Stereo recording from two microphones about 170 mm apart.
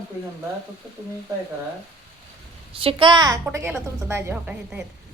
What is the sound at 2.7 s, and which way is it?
Speech, 30° right (ahead or behind).